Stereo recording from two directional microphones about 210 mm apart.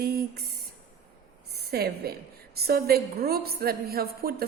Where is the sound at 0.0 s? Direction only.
50° right (ahead or behind).